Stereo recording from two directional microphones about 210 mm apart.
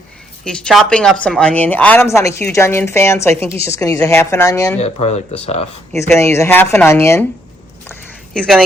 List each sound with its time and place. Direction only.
0.4 s a woman's voice: centre (ahead or behind)
4.8 s speech: 30° left (ahead or behind)
6.0 s speech: 15° left (ahead or behind)
7.9 s a sound: 5° left (ahead or behind)